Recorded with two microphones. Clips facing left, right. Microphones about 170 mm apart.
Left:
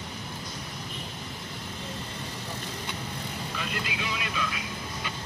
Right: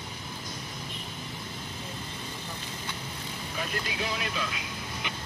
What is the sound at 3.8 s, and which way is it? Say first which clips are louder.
Speech: right 1 dB; 40° right (ahead or behind).